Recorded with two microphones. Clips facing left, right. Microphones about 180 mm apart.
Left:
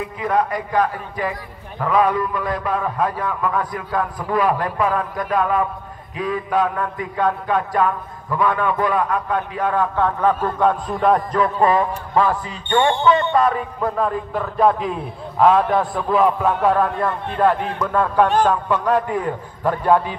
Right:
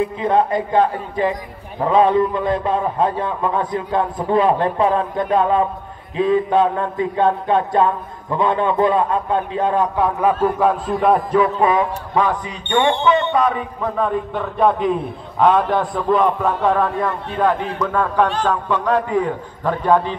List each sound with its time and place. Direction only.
0.0 s a man's voice: 25° right (ahead or behind)
9.9 s a man's voice: 10° right (ahead or behind); by 20.2 s 10° left (ahead or behind)